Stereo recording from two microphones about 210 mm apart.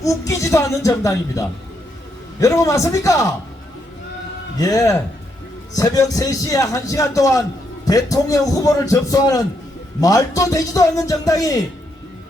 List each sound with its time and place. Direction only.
0.0 s a man's voice: 15° left (ahead or behind)
4.5 s a man's voice: 15° left (ahead or behind)